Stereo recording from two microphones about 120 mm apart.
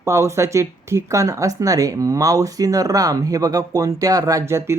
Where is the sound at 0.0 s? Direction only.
25° right (ahead or behind).